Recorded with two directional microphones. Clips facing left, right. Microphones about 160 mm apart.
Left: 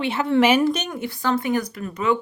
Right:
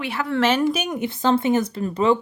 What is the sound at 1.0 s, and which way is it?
A woman's voice, 20° right (ahead or behind).